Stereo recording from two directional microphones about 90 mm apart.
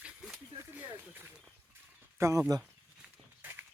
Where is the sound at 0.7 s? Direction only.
20° right (ahead or behind).